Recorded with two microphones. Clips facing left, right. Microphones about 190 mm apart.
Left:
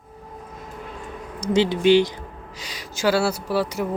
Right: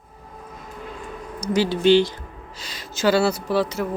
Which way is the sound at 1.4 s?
25° left (ahead or behind).